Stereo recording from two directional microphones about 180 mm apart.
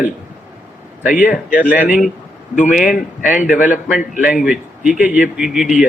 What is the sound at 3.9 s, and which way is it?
A man's voice, 5° right (ahead or behind).